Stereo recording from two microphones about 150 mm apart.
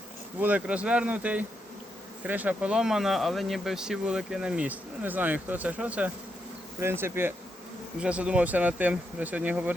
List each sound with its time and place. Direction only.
0.3 s speech: 10° right (ahead or behind)